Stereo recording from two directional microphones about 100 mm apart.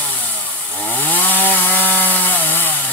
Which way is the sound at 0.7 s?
15° left (ahead or behind).